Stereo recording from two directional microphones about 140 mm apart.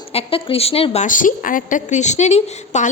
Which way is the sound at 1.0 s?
70° left (ahead or behind).